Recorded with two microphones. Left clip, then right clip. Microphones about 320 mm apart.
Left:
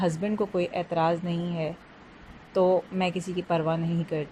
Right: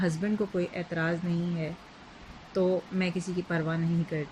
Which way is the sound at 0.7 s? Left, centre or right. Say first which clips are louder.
Left 6 dB; left.